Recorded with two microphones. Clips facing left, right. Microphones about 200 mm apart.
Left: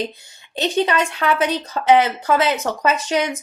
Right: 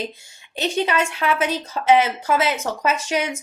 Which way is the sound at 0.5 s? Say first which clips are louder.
Left 2 dB; 10° right (ahead or behind).